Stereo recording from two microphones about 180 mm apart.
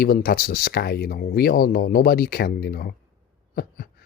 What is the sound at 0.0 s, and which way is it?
Speech, 55° left (ahead or behind).